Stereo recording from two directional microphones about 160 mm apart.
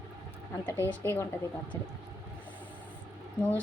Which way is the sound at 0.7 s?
15° left (ahead or behind).